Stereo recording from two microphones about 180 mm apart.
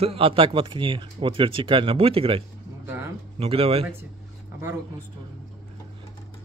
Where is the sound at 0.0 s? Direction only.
30° right (ahead or behind).